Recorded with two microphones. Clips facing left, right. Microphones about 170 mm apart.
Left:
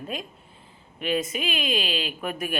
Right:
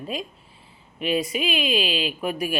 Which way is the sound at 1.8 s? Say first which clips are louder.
Right 4 dB; 45° left (ahead or behind).